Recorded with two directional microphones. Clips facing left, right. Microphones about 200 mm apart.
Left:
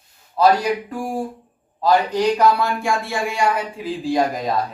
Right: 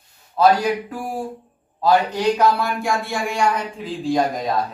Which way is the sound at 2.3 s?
Centre (ahead or behind).